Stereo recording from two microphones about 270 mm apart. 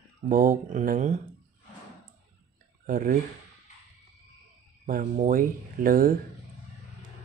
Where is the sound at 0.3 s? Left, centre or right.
Right.